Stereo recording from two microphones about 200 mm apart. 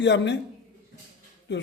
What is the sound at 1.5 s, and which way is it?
Speech, 60° left (ahead or behind).